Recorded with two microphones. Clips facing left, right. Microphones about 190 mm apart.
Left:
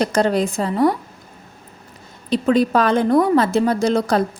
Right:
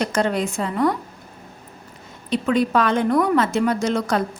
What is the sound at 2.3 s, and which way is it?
A woman's voice, 35° left (ahead or behind).